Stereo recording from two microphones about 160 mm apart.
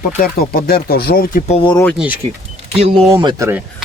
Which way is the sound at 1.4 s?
35° left (ahead or behind).